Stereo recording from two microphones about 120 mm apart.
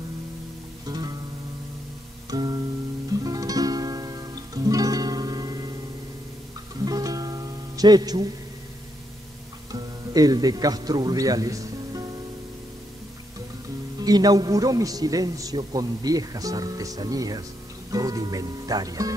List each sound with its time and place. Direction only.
0.8 s music: 35° right (ahead or behind)
2.2 s music: 35° right (ahead or behind)
6.8 s music: 30° right (ahead or behind)
9.7 s a man's voice: 30° right (ahead or behind)
13.9 s a man's voice: 35° right (ahead or behind)